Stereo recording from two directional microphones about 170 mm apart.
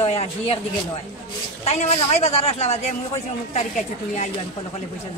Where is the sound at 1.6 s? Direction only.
40° left (ahead or behind).